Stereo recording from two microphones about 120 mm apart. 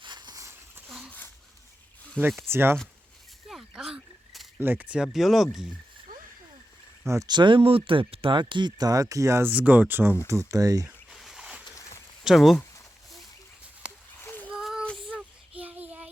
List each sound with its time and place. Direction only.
0.0 s a sound: 40° right (ahead or behind)
0.9 s a sound: centre (ahead or behind)
2.2 s speech: 10° left (ahead or behind)
2.5 s speech: 20° right (ahead or behind)
3.5 s a sound: 5° right (ahead or behind)
4.6 s speech: 15° right (ahead or behind)
7.3 s speech: 40° right (ahead or behind); by 10.2 s 15° right (ahead or behind)
10.2 s speech: 25° right (ahead or behind)
11.1 s a sound: centre (ahead or behind)
12.2 s speech: centre (ahead or behind)
14.2 s child singing: 20° left (ahead or behind)
14.4 s child singing: 5° right (ahead or behind)